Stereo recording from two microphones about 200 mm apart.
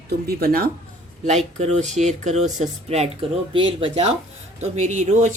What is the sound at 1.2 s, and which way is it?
Speech, 35° right (ahead or behind).